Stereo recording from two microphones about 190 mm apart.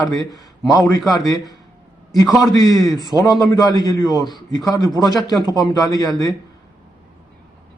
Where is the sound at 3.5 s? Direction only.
20° left (ahead or behind).